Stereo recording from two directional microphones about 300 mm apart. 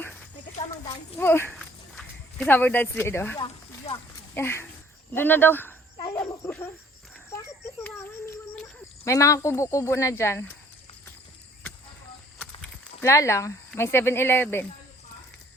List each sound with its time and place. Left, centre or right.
0.0 s a sound: centre
1.2 s speech: centre
3.9 s speech: left
4.4 s speech: centre
5.1 s a sound: centre
7.9 s child singing: centre
9.0 s speech: centre
12.4 s speech: centre